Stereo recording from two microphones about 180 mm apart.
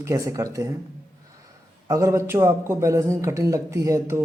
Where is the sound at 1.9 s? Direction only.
20° right (ahead or behind).